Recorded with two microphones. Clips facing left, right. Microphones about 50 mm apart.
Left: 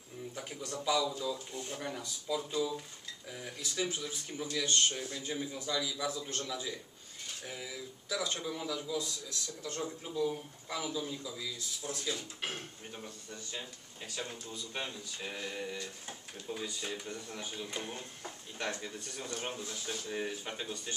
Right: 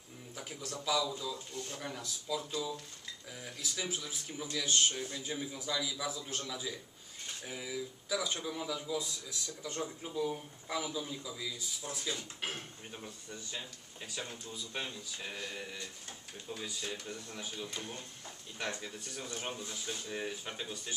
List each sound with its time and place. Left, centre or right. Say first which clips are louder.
0.4 s speech: left 1 dB; centre
17.6 s speech: left 2 dB; centre
18.8 s speech: left 1 dB; centre